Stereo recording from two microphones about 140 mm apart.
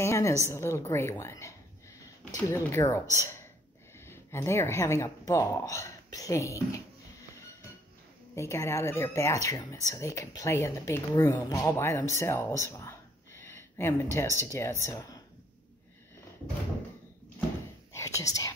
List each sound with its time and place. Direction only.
0.0 s a sound: 20° left (ahead or behind)
0.5 s speech: 20° left (ahead or behind)
8.4 s speech: 20° left (ahead or behind)
12.5 s a sound: 20° left (ahead or behind)
14.4 s speech: 20° left (ahead or behind)
17.9 s speech: 20° left (ahead or behind)